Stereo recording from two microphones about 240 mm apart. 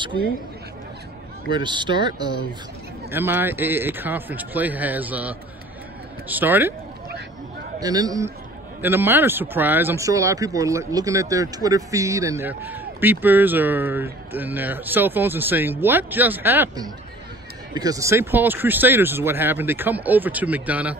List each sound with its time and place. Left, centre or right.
1.5 s speech: centre
7.8 s speech: centre